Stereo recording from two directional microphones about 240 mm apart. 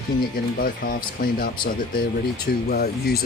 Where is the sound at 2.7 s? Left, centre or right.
Left.